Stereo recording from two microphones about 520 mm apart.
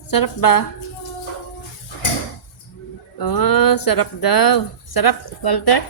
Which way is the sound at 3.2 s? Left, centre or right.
Left.